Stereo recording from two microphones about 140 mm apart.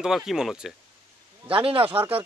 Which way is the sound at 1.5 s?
40° right (ahead or behind).